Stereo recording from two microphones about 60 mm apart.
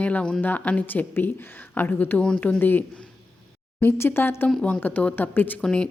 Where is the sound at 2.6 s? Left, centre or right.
Left.